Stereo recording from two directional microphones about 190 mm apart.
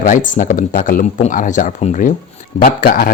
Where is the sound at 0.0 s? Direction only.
45° left (ahead or behind).